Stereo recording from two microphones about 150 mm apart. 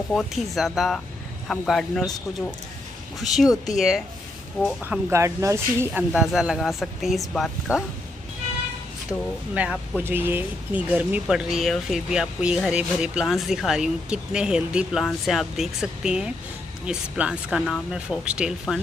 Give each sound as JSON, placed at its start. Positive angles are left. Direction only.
{"t": 0.1, "sound": "speech", "side_deg": 0}
{"t": 5.1, "sound": "speech", "side_deg": -20}
{"t": 6.1, "sound": "speech", "side_deg": -5}
{"t": 9.5, "sound": "speech", "side_deg": -10}